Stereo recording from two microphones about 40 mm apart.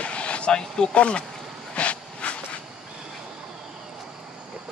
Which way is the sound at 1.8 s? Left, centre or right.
Left.